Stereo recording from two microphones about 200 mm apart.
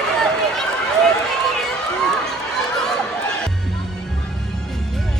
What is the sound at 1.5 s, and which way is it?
Run, centre (ahead or behind).